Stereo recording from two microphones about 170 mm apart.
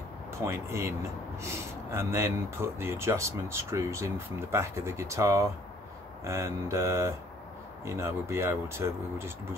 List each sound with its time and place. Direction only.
0.4 s speech: 15° right (ahead or behind)